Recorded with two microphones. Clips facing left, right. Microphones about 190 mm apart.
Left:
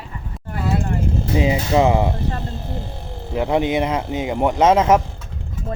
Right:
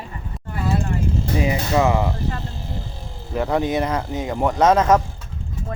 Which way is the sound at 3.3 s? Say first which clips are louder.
Left 2 dB; 20° left (ahead or behind).